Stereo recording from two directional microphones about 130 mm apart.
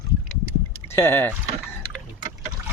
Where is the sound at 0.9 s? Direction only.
20° left (ahead or behind).